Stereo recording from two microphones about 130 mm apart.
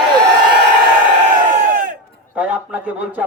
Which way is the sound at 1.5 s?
90° right.